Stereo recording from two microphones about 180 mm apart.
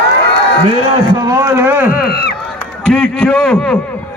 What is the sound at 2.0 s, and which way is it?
Speech, 65° left (ahead or behind).